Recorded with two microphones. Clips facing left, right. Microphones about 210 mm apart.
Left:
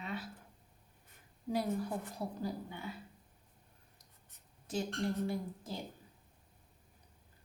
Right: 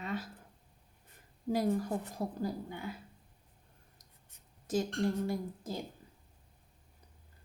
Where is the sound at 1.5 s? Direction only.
45° right (ahead or behind).